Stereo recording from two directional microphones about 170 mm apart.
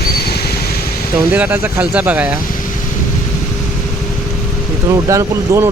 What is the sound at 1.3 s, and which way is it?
Speech, 10° right (ahead or behind).